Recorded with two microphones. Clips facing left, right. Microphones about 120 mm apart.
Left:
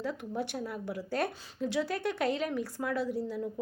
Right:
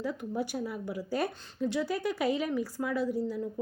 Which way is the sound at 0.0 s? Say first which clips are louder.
Right 2 dB; centre (ahead or behind).